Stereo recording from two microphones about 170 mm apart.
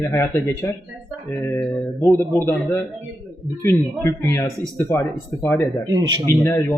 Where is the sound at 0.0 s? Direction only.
15° left (ahead or behind).